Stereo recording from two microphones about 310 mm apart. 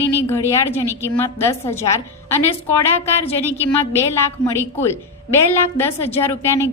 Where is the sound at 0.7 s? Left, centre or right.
Centre.